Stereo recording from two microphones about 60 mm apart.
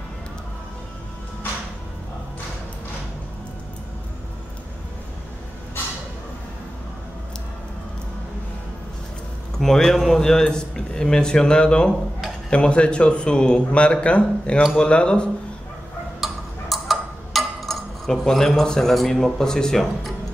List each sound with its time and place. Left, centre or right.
9.6 s a man's voice: centre
16.2 s tick-tock: centre